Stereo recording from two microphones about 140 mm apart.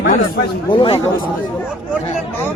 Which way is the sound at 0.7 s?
35° left (ahead or behind).